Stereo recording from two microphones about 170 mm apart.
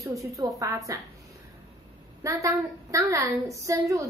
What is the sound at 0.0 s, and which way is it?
Speech, 20° right (ahead or behind).